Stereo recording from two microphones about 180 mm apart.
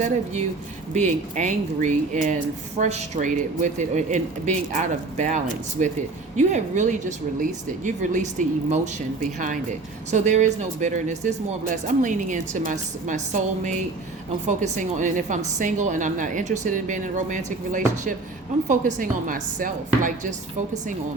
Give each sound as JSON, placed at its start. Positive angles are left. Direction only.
{"t": 0.9, "sound": "speech", "side_deg": -40}
{"t": 10.1, "sound": "speech", "side_deg": -40}